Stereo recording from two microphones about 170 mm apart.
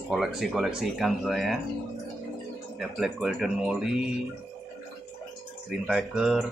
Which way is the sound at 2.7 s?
Centre (ahead or behind).